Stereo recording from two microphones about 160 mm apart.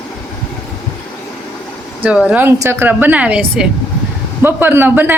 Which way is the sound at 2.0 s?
5° right (ahead or behind).